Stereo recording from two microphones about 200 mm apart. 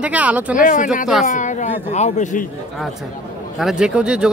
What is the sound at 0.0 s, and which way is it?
Speech, 5° right (ahead or behind).